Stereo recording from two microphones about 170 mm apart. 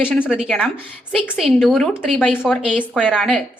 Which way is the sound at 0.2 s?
Centre (ahead or behind).